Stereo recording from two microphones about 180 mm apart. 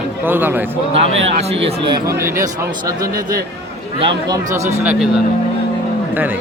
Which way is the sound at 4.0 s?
20° right (ahead or behind).